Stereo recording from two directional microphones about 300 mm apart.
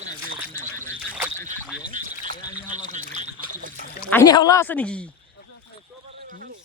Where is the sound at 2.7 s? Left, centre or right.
Right.